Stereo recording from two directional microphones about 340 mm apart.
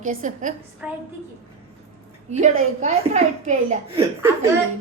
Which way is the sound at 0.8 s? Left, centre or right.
Centre.